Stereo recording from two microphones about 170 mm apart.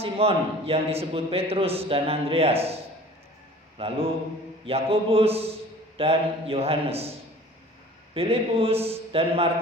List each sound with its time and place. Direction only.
0.0 s a man's voice: 35° right (ahead or behind)
3.8 s a man's voice: 35° right (ahead or behind)
8.1 s a man's voice: 35° right (ahead or behind)